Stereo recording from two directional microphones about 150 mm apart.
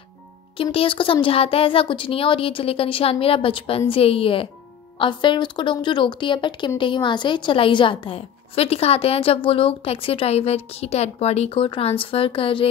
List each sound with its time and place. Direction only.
0.6 s a woman's voice: 35° left (ahead or behind)